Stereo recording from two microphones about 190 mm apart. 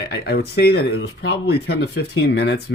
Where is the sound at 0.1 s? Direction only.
55° left (ahead or behind).